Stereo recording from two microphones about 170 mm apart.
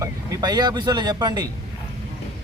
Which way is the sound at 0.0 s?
25° right (ahead or behind).